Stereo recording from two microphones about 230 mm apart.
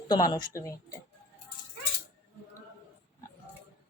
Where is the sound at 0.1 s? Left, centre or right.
Centre.